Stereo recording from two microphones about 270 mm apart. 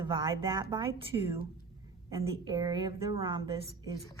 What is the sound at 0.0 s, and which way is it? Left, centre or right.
A woman's voice, centre.